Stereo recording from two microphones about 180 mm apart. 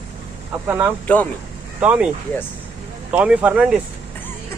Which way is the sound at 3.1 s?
5° right (ahead or behind).